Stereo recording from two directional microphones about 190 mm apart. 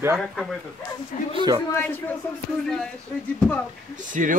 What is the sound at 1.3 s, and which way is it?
Speech, 25° right (ahead or behind).